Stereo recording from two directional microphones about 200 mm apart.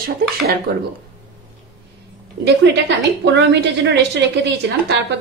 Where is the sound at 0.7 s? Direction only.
50° right (ahead or behind).